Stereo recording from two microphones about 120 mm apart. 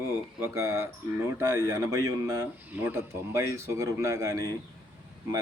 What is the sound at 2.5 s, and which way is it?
A man's voice, 15° right (ahead or behind).